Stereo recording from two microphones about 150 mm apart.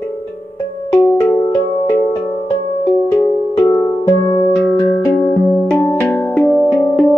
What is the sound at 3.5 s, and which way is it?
Music, 15° left (ahead or behind).